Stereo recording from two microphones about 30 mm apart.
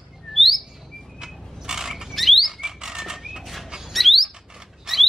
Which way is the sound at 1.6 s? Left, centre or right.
Centre.